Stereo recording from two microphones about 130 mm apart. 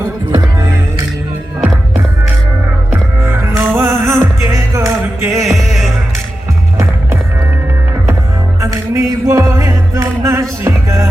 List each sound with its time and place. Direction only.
2.9 s music: 15° right (ahead or behind)
8.6 s music: 20° right (ahead or behind)